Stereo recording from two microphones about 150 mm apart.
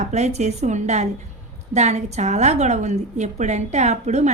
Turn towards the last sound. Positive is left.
turn(degrees=-50)  # may be behind; listen again after turning